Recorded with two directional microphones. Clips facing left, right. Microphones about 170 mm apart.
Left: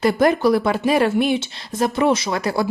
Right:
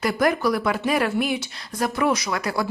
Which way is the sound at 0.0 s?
25° left (ahead or behind).